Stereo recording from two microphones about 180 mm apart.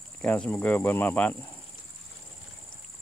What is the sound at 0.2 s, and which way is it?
Speech, 5° left (ahead or behind).